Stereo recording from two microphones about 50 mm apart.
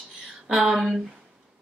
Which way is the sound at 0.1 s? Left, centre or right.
Centre.